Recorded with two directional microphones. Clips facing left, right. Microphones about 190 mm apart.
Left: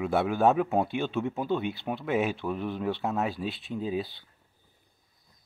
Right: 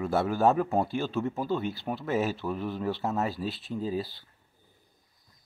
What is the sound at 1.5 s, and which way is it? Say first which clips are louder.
Speech: left 2 dB; 15° left (ahead or behind).